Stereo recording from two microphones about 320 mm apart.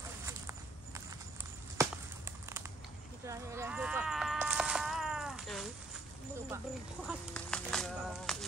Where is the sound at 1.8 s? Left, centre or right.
Centre.